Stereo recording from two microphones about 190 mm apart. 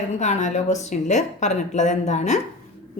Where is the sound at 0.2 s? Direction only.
40° left (ahead or behind).